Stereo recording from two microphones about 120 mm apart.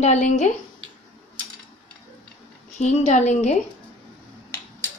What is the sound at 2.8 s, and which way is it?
Speech, 75° left (ahead or behind).